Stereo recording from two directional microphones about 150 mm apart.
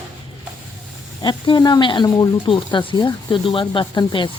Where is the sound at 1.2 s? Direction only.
30° left (ahead or behind).